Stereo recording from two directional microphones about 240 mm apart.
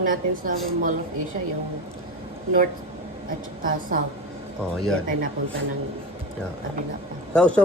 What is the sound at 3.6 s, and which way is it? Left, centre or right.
Speech, right.